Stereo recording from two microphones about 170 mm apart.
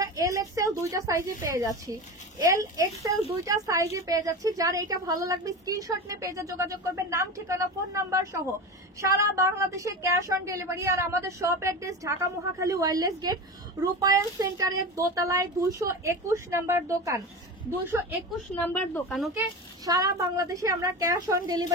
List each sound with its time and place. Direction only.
0.0 s a sound: 20° right (ahead or behind)
1.4 s a woman's voice: 20° right (ahead or behind)
18.6 s speech: 10° left (ahead or behind)
19.0 s speech: centre (ahead or behind)
19.3 s a woman's voice: 20° right (ahead or behind)